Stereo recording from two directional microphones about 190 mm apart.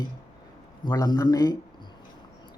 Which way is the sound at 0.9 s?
20° left (ahead or behind).